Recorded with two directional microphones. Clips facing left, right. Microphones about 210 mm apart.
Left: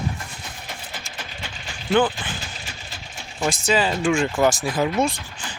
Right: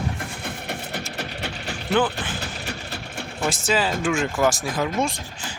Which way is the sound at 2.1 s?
65° right (ahead or behind).